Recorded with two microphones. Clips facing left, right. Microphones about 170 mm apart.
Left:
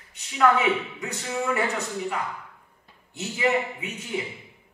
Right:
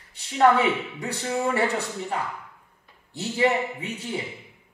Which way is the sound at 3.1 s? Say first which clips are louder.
Right 2 dB; 35° right (ahead or behind).